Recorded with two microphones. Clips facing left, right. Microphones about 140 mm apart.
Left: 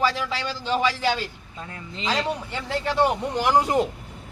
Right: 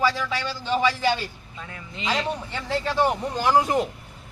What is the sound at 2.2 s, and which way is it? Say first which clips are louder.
A man's voice: even; 15° left (ahead or behind).